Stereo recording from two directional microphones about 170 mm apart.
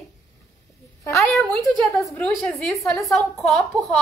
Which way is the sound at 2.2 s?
Centre (ahead or behind).